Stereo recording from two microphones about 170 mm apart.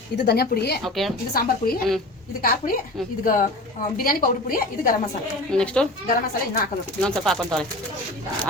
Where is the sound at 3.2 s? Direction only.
55° left (ahead or behind).